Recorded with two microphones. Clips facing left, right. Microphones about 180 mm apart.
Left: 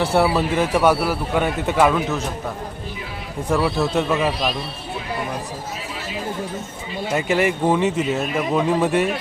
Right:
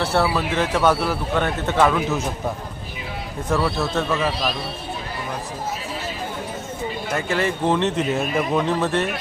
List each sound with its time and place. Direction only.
0.0 s speech: 15° left (ahead or behind)
3.5 s speech: 15° left (ahead or behind)
7.1 s speech: 15° left (ahead or behind)